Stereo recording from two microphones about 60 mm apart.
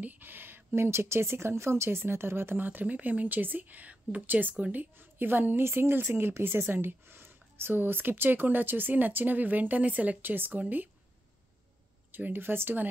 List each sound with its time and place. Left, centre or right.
0.0 s a sound: right
0.7 s a woman's voice: right
12.1 s a woman's voice: right